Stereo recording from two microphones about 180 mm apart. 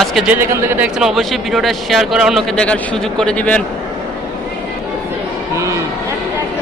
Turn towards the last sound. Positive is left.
turn(degrees=-15)  # may be behind; listen again after turning